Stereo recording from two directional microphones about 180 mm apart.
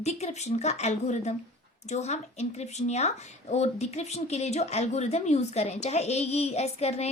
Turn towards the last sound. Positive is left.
turn(degrees=35)  # may be behind; listen again after turning